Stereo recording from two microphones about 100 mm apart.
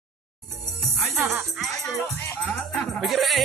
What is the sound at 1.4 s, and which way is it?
Speech, centre (ahead or behind).